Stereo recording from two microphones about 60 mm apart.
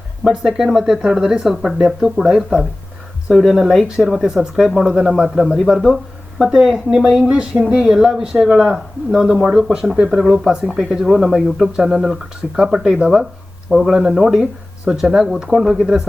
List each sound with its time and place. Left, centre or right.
0.3 s speech: centre
7.1 s speech: centre